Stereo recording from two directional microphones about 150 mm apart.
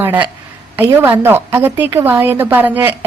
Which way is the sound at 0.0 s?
10° right (ahead or behind).